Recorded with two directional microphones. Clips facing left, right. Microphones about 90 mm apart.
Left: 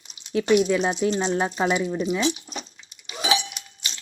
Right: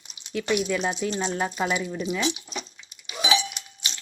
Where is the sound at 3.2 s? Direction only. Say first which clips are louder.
Even; 45° left (ahead or behind).